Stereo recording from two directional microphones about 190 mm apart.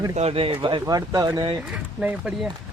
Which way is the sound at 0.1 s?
30° right (ahead or behind).